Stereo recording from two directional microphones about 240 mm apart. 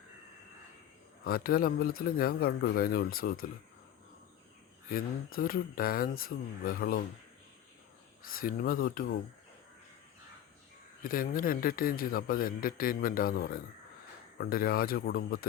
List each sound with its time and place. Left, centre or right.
1.2 s speech: left
4.9 s speech: left
8.2 s speech: left
11.0 s speech: left